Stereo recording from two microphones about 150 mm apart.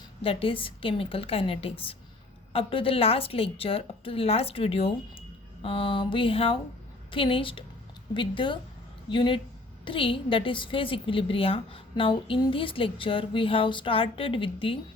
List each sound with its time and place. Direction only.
0.2 s a woman's voice: 40° left (ahead or behind)